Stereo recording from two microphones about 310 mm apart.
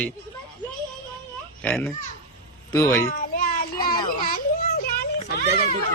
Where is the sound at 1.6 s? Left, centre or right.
Centre.